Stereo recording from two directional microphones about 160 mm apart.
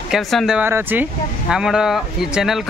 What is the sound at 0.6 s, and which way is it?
Speech, 15° right (ahead or behind).